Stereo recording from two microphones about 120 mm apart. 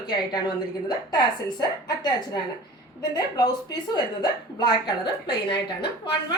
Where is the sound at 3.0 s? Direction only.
35° left (ahead or behind).